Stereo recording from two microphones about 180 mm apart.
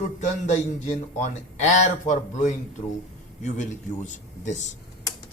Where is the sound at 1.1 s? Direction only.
40° left (ahead or behind).